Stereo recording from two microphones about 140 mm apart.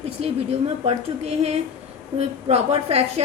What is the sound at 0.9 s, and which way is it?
A woman's voice, 50° right (ahead or behind).